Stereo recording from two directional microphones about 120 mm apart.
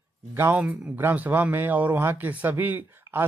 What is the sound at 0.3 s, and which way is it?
Speech, 15° right (ahead or behind).